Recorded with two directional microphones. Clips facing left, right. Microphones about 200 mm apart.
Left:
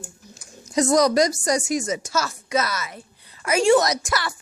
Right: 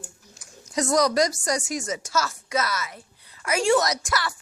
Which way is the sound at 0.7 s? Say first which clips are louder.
Left 4 dB; 20° left (ahead or behind).